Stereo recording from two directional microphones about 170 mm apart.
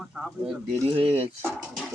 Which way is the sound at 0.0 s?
Centre (ahead or behind).